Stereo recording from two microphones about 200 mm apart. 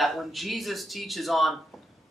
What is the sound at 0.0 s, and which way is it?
Speech, centre (ahead or behind).